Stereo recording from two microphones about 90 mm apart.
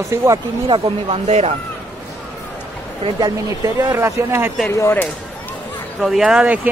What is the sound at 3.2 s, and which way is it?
Speech, 40° right (ahead or behind).